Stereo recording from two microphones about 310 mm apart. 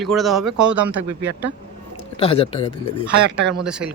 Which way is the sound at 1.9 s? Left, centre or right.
Centre.